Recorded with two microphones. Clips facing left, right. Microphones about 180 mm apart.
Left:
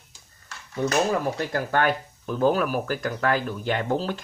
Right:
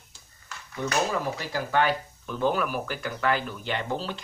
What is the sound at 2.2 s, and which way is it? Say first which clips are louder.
Speech: left 4 dB; 40° left (ahead or behind).